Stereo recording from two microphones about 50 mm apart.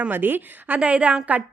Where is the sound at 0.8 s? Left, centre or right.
Right.